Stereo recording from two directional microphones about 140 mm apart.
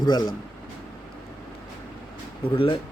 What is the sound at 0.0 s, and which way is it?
Speech, 30° left (ahead or behind).